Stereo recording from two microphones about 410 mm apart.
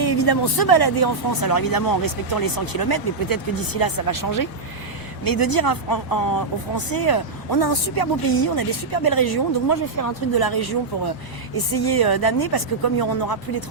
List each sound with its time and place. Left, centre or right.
0.0 s speech: left